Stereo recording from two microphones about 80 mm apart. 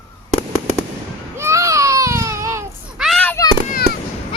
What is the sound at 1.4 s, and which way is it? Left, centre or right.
Baby cry, right.